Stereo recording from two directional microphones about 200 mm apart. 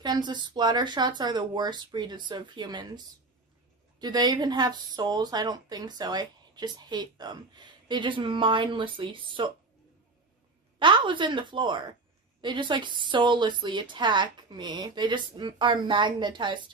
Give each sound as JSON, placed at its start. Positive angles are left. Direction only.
{"t": 0.0, "sound": "speech", "side_deg": -20}
{"t": 4.0, "sound": "speech", "side_deg": -20}
{"t": 10.8, "sound": "speech", "side_deg": -25}